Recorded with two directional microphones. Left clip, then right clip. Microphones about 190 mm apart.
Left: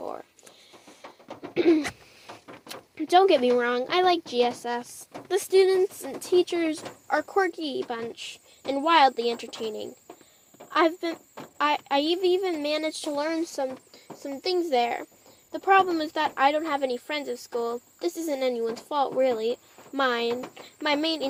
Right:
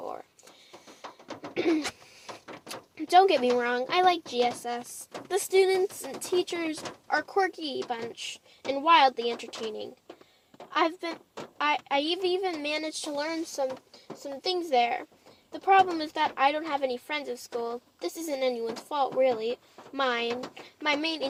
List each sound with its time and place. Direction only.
0.0 s a sound: 30° left (ahead or behind)
1.5 s bird: 35° left (ahead or behind)
2.6 s a woman's voice: 35° left (ahead or behind)